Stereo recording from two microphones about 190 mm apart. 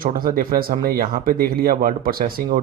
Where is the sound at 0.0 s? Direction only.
50° right (ahead or behind).